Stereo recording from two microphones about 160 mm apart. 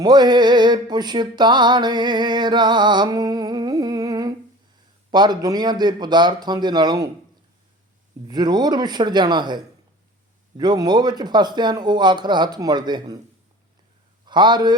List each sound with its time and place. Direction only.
0.0 s music: 25° right (ahead or behind)
8.3 s music: 25° right (ahead or behind)
10.6 s music: 25° right (ahead or behind)
14.3 s music: 30° right (ahead or behind)